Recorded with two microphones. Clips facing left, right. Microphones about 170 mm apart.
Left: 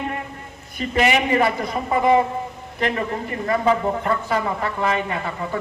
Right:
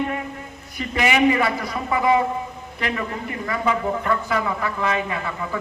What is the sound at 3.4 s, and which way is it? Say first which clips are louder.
Speech: left 4 dB; 30° left (ahead or behind).